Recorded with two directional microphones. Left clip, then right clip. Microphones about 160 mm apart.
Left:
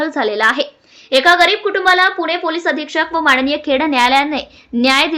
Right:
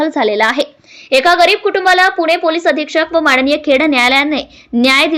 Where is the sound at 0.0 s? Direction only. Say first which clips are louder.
Right 2 dB; 15° right (ahead or behind).